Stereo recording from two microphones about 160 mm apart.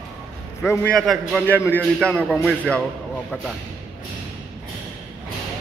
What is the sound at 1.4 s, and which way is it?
A man's voice, 10° left (ahead or behind).